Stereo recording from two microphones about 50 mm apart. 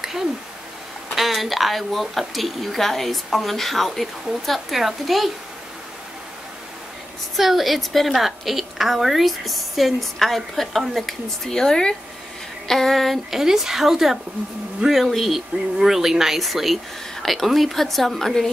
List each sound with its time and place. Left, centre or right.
1.1 s a woman's voice: centre
7.3 s a woman's voice: centre